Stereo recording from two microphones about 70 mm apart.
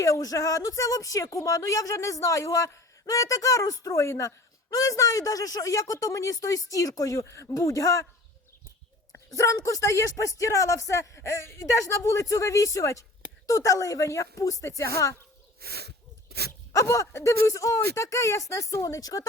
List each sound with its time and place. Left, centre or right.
0.0 s speech: left
4.7 s speech: left
9.3 s speech: left
16.5 s a sound: left
17.1 s speech: left